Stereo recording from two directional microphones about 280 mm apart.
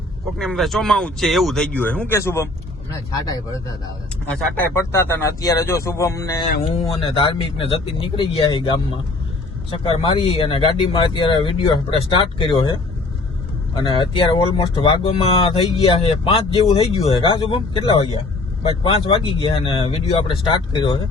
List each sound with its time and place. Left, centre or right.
0.3 s speech: centre
13.7 s speech: centre